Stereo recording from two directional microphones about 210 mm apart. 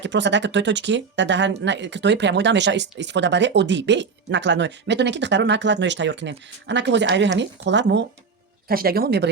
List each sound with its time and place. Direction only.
0.0 s speech: 55° right (ahead or behind)
8.6 s speech: 45° right (ahead or behind)